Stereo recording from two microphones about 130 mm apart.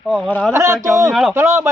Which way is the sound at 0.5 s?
25° right (ahead or behind).